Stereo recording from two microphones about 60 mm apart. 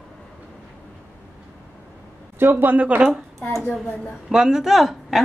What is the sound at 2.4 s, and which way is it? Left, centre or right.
Speech, right.